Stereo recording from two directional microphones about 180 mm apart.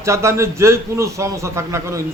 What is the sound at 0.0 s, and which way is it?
A man's voice, 15° right (ahead or behind).